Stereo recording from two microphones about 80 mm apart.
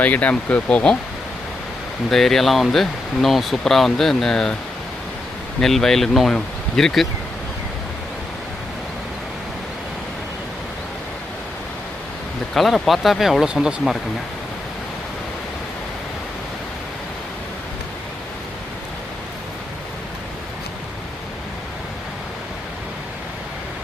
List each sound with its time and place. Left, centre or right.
0.0 s speech: centre
2.0 s speech: centre
5.5 s speech: centre
12.5 s speech: centre